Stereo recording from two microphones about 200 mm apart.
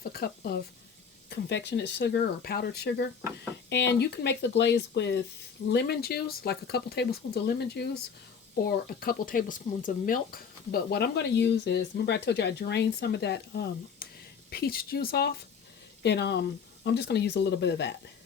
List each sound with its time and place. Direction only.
0.1 s speech: 50° left (ahead or behind)